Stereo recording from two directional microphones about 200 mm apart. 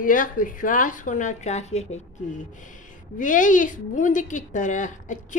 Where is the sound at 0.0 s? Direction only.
45° left (ahead or behind).